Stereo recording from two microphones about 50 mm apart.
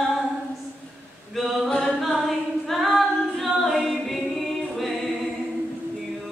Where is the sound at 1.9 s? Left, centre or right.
Centre.